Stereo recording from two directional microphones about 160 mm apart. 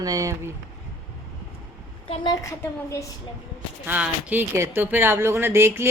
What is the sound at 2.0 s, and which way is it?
Speech, 40° left (ahead or behind).